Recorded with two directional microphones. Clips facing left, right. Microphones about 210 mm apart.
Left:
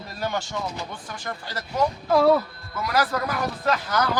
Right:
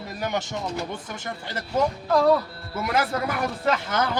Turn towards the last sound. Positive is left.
turn(degrees=-25)  # may be behind; listen again after turning